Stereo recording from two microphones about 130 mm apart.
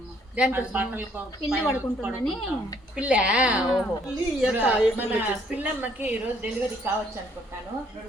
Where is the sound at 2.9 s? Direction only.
10° right (ahead or behind).